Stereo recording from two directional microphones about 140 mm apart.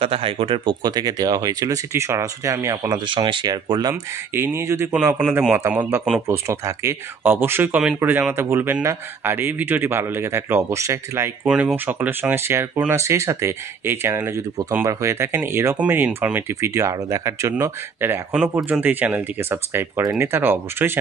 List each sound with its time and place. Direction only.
0.0 s speech: 40° right (ahead or behind); by 3.0 s 25° right (ahead or behind)
3.1 s speech: 35° right (ahead or behind)
3.9 s speech: 15° right (ahead or behind)
11.4 s speech: 5° right (ahead or behind)